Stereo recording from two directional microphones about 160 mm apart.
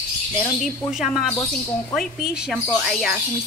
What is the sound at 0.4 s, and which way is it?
Speech, centre (ahead or behind).